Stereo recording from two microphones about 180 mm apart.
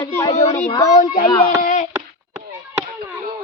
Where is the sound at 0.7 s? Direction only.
20° left (ahead or behind).